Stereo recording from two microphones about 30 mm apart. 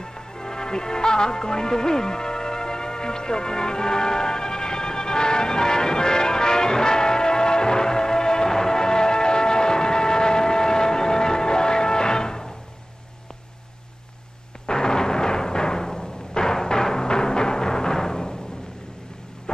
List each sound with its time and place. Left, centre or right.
0.0 s music: left
14.7 s timpani: left